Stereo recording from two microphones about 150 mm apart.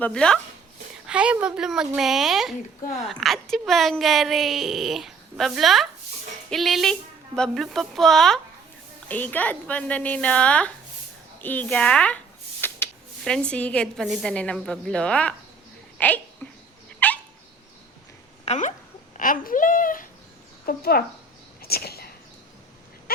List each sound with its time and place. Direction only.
0.0 s a woman's voice: 5° left (ahead or behind)
1.0 s a woman's voice: 5° right (ahead or behind)
12.6 s a sound: 15° left (ahead or behind)
13.2 s a woman's voice: 5° left (ahead or behind)
17.0 s dog: 10° left (ahead or behind)
18.4 s speech: 50° left (ahead or behind)
19.1 s a child's voice: 65° left (ahead or behind)
20.7 s speech: 90° left
21.6 s a sound: 90° left